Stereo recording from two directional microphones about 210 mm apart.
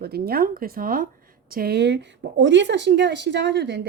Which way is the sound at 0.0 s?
45° right (ahead or behind).